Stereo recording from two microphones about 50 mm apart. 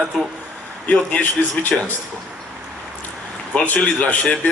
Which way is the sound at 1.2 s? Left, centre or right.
Left.